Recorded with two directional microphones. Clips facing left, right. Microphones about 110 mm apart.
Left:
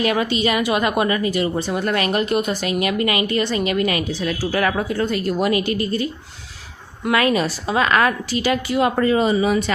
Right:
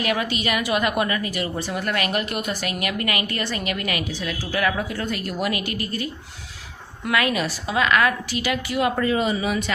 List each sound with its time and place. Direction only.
0.0 s a woman's voice: 30° left (ahead or behind)
4.3 s a woman's voice: 40° left (ahead or behind)
4.9 s a woman's voice: 30° left (ahead or behind)